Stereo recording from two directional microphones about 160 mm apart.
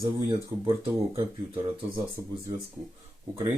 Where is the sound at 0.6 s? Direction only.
30° right (ahead or behind).